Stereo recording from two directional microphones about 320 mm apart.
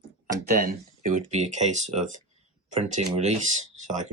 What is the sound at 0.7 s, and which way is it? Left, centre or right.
Speech, right.